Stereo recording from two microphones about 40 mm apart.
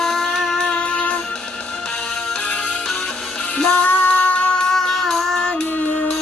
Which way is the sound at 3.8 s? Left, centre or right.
Left.